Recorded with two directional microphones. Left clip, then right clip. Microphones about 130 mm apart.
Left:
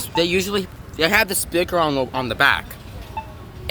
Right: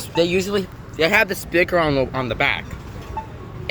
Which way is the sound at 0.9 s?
75° left (ahead or behind).